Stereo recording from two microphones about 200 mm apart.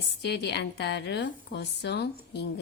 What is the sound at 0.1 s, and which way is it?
A woman's voice, 55° left (ahead or behind).